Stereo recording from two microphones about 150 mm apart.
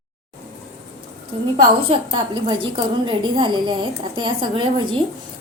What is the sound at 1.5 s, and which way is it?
A woman's voice, 40° right (ahead or behind).